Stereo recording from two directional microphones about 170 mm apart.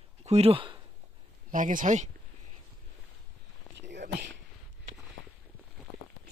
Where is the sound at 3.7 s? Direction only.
90° right.